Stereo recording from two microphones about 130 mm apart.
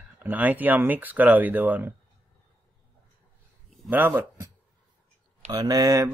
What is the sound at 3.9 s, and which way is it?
Speech, 15° right (ahead or behind).